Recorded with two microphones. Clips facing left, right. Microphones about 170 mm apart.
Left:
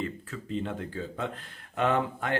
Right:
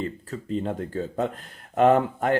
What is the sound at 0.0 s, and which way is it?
Speech, 40° right (ahead or behind).